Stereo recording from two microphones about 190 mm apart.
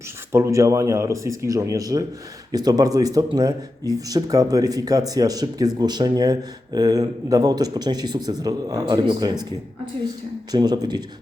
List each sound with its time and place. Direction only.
0.3 s speech: 15° right (ahead or behind)
10.5 s speech: 20° right (ahead or behind)